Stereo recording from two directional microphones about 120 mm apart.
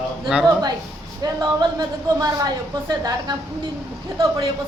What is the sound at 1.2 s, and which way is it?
A woman's voice, 35° right (ahead or behind).